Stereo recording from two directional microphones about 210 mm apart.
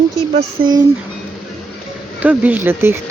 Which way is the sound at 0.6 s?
20° right (ahead or behind).